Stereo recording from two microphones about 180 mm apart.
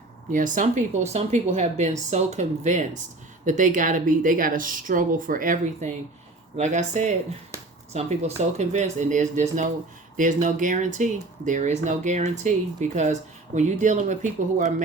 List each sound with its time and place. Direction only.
0.3 s speech: 45° right (ahead or behind)
7.5 s a sound: 15° right (ahead or behind)
7.9 s speech: 40° right (ahead or behind)